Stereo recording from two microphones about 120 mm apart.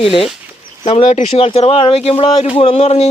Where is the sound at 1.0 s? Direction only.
85° left.